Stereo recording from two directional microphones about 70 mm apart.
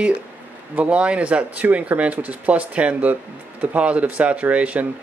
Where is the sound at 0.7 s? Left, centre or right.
Centre.